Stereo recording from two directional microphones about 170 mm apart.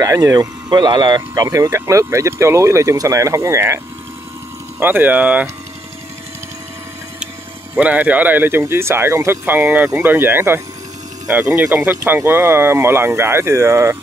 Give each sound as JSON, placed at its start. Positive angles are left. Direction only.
{"t": 0.0, "sound": "speech", "side_deg": -20}
{"t": 7.7, "sound": "speech", "side_deg": -10}